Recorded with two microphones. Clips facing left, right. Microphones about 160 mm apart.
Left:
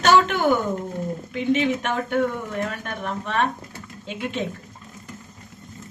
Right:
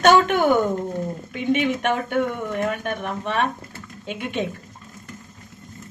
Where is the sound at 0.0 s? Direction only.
55° right (ahead or behind).